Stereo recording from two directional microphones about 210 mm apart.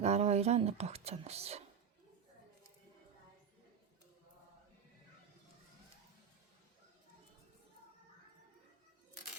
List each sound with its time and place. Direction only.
0.0 s speech: 30° right (ahead or behind)